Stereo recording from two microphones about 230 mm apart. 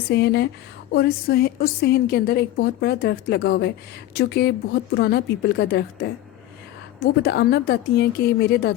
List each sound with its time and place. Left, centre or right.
0.1 s a woman's voice: left